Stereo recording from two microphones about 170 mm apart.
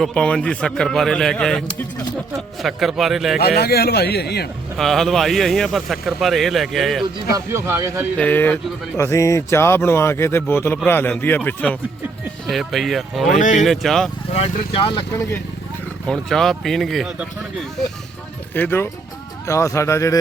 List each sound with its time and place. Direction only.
0.0 s speech: 5° left (ahead or behind)
3.3 s a man's voice: 65° left (ahead or behind)
4.8 s speech: centre (ahead or behind)
7.3 s speech: 15° right (ahead or behind)
8.2 s speech: 10° left (ahead or behind)
13.3 s speech: 45° left (ahead or behind)
13.7 s speech: centre (ahead or behind)
14.3 s speech: 35° left (ahead or behind)
16.0 s speech: 5° left (ahead or behind)
18.5 s speech: 10° left (ahead or behind)